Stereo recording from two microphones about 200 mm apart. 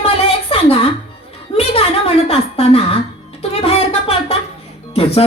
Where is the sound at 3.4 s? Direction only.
30° left (ahead or behind).